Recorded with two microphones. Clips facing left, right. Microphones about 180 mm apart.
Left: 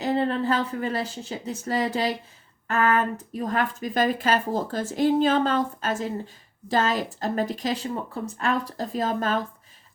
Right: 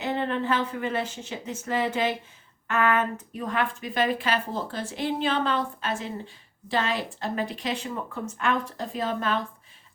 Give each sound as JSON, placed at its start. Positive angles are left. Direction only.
{"t": 0.0, "sound": "speech", "side_deg": 35}